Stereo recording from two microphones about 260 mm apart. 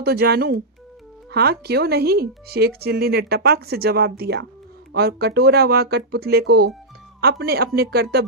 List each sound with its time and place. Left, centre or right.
0.0 s speech: right